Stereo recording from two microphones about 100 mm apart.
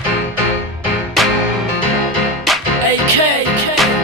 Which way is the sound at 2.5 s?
Centre (ahead or behind).